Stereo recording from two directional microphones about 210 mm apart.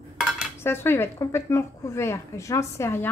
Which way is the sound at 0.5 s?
10° left (ahead or behind).